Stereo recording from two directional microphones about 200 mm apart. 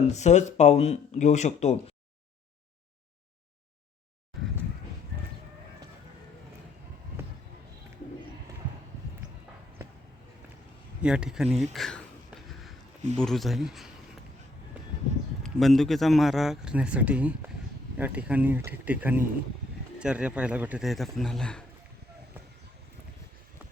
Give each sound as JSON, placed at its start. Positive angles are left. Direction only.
{"t": 0.1, "sound": "speech", "side_deg": 35}
{"t": 11.0, "sound": "speech", "side_deg": -5}
{"t": 11.4, "sound": "speech", "side_deg": -35}
{"t": 11.7, "sound": "a sound", "side_deg": 0}
{"t": 13.1, "sound": "speech", "side_deg": 0}
{"t": 15.4, "sound": "speech", "side_deg": 0}